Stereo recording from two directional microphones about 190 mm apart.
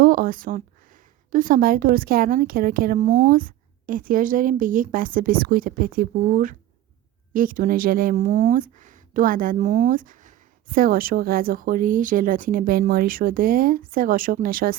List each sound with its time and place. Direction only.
0.0 s speech: 50° right (ahead or behind)